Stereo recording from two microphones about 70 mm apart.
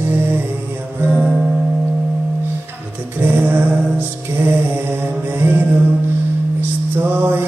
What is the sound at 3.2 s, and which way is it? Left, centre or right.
Music, right.